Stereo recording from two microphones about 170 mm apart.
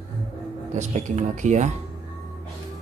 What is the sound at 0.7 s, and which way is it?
Speech, 45° right (ahead or behind).